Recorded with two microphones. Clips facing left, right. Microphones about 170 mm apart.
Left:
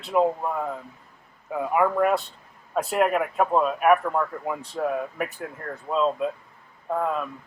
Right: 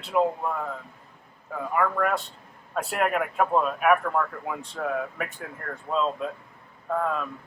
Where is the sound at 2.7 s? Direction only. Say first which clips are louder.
Left 4 dB; centre (ahead or behind).